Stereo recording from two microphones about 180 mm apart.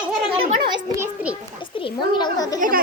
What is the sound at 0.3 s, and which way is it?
Children playing, 30° right (ahead or behind).